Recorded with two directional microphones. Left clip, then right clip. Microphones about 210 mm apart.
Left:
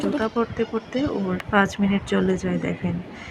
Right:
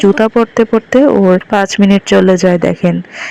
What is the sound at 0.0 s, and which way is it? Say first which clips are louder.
Speech: right 14 dB; 35° right (ahead or behind).